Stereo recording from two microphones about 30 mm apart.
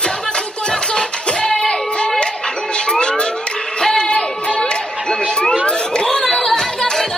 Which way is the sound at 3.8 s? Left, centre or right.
Left.